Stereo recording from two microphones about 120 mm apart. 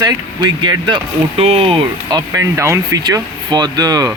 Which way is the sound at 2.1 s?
30° right (ahead or behind).